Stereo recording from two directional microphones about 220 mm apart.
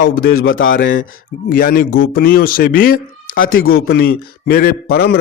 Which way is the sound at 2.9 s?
65° left (ahead or behind).